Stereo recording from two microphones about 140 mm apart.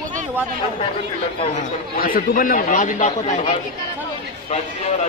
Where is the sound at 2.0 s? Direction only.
85° left; by 3.3 s 65° left (ahead or behind).